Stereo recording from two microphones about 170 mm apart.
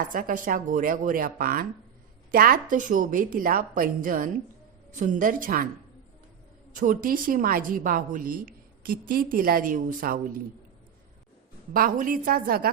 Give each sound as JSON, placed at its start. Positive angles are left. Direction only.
{"t": 0.1, "sound": "a woman's voice", "side_deg": -50}
{"t": 6.7, "sound": "a woman's voice", "side_deg": -50}
{"t": 11.7, "sound": "a woman's voice", "side_deg": -55}